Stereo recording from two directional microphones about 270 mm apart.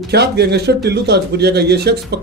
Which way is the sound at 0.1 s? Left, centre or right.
Right.